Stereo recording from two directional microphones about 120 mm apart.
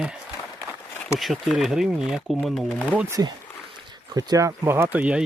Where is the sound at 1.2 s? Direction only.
Centre (ahead or behind).